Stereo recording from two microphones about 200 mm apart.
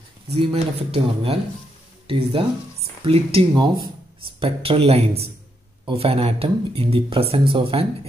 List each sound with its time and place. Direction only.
0.3 s speech: 30° right (ahead or behind)